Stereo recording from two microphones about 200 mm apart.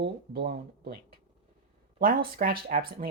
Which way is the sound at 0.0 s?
55° right (ahead or behind).